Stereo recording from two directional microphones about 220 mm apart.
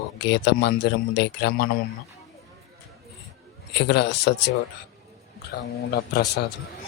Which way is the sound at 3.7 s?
50° left (ahead or behind).